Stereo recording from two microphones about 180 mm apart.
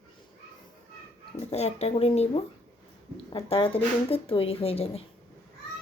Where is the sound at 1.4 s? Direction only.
35° left (ahead or behind).